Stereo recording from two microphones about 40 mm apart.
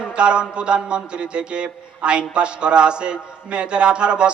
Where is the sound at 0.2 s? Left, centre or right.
Right.